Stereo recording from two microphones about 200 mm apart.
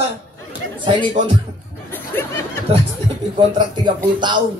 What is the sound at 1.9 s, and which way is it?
Speech, 10° left (ahead or behind).